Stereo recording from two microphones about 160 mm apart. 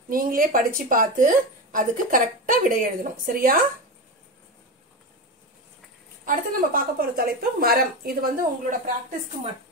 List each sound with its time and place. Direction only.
0.1 s a woman's voice: 60° right (ahead or behind)
6.2 s a woman's voice: 60° right (ahead or behind)